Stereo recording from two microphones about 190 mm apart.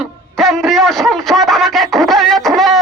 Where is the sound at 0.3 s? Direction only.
Centre (ahead or behind).